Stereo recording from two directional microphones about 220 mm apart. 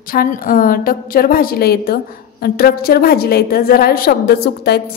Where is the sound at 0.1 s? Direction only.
40° left (ahead or behind).